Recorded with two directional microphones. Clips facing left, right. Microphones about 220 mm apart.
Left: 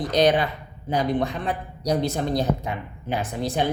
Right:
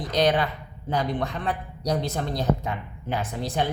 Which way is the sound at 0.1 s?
15° left (ahead or behind).